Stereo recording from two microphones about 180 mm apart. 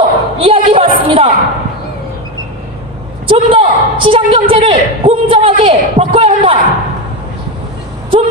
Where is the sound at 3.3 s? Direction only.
30° right (ahead or behind).